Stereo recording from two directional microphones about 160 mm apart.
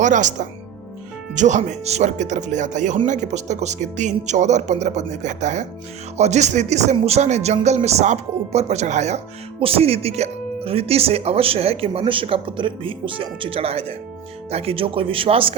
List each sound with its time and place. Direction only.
0.0 s speech: 50° right (ahead or behind); by 15.5 s 35° right (ahead or behind)